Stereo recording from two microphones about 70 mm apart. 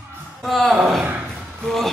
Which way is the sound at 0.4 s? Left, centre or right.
Centre.